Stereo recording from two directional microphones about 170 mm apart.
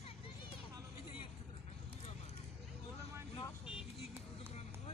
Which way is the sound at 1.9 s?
40° left (ahead or behind).